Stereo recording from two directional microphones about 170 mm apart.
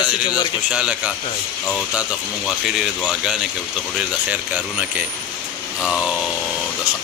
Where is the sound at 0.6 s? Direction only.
5° right (ahead or behind).